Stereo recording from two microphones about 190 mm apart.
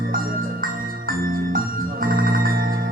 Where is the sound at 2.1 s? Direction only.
50° right (ahead or behind).